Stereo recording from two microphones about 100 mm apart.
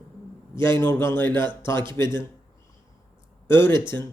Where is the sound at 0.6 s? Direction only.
25° left (ahead or behind).